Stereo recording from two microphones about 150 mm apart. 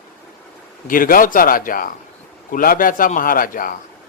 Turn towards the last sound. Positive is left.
turn(degrees=70)  # may be behind; listen again after turning